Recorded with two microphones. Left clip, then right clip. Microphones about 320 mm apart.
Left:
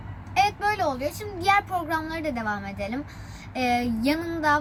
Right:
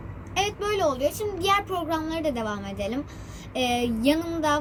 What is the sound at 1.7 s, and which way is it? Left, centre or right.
Speech, centre.